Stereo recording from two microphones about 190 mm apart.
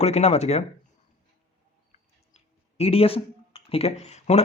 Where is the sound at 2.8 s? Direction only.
30° left (ahead or behind).